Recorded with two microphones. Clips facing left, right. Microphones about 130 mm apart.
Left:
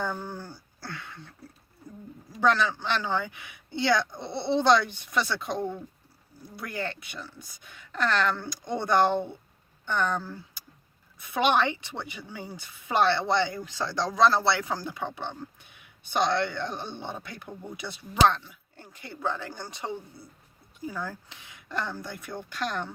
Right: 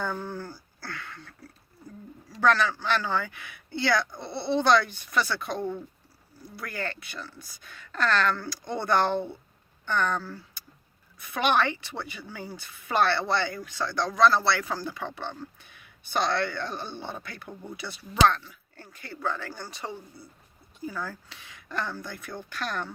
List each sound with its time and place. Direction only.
0.0 s speech: 10° left (ahead or behind)
2.3 s a woman's voice: 20° left (ahead or behind)